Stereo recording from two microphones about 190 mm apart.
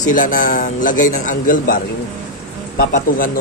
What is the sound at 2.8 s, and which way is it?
Speech, 50° left (ahead or behind).